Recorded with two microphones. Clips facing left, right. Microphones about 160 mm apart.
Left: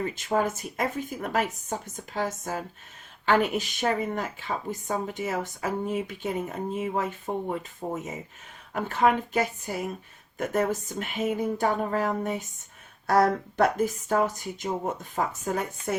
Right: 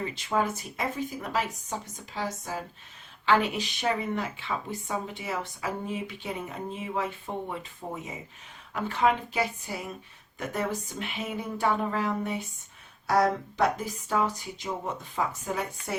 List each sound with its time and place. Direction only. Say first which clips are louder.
0.0 s speech: left 2 dB; 45° left (ahead or behind)